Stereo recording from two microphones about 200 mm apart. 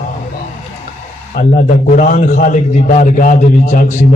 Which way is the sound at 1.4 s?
35° left (ahead or behind).